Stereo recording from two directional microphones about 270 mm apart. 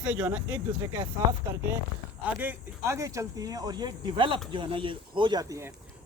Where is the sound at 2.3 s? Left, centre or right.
Centre.